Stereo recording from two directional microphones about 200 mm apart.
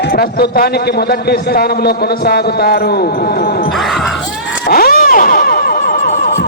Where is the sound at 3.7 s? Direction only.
Centre (ahead or behind).